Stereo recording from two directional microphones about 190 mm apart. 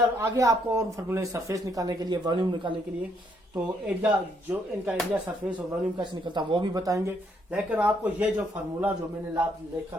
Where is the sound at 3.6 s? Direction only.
5° right (ahead or behind).